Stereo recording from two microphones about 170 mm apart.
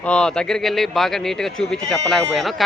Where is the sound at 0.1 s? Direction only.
5° left (ahead or behind).